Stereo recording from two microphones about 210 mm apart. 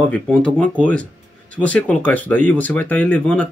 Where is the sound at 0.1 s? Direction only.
5° left (ahead or behind).